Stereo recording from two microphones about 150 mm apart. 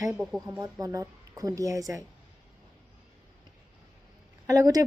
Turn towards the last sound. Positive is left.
turn(degrees=-25)  # may be behind; listen again after turning